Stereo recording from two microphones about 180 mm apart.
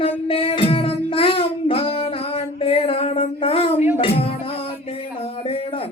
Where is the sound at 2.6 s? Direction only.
35° left (ahead or behind).